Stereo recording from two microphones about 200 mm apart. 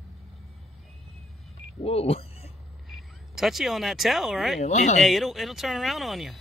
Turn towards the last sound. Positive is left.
turn(degrees=0)  # may be behind; listen again after turning